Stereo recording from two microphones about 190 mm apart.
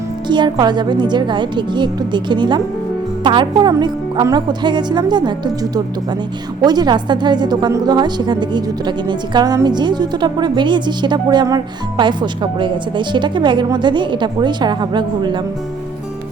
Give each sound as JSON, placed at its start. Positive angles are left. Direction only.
{"t": 0.3, "sound": "a woman's voice", "side_deg": -25}
{"t": 6.6, "sound": "a woman's voice", "side_deg": -20}